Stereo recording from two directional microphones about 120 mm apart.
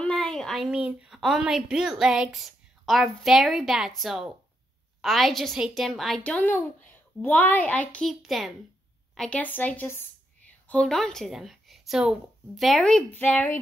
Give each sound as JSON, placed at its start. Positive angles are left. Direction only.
{"t": 0.0, "sound": "a woman's voice", "side_deg": 5}
{"t": 8.1, "sound": "a child's voice", "side_deg": 0}
{"t": 9.4, "sound": "a woman's voice", "side_deg": 15}
{"t": 10.7, "sound": "a woman's voice", "side_deg": 5}
{"t": 13.1, "sound": "a woman's voice", "side_deg": 15}